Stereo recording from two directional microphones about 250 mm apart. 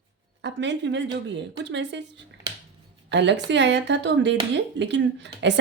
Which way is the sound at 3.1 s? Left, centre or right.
Right.